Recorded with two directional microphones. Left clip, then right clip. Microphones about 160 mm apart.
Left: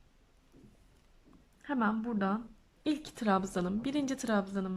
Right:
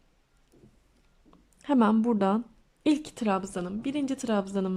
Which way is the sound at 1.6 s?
20° right (ahead or behind).